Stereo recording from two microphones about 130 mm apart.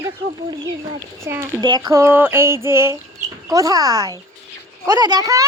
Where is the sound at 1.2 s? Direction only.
20° right (ahead or behind).